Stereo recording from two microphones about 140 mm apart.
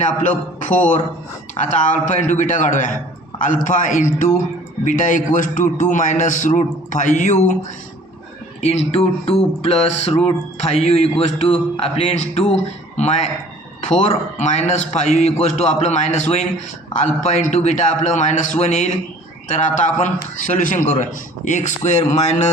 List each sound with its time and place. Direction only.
0.0 s a man's voice: 60° left (ahead or behind)
8.6 s music: 45° left (ahead or behind)
14.3 s a man's voice: 55° left (ahead or behind)